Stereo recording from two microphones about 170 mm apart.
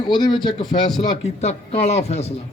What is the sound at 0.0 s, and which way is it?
Speech, 25° left (ahead or behind).